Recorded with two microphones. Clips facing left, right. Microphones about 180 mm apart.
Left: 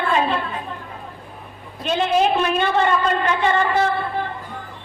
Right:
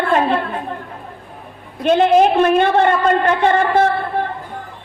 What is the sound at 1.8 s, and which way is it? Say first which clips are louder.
A woman's voice: right 7 dB; 55° right (ahead or behind).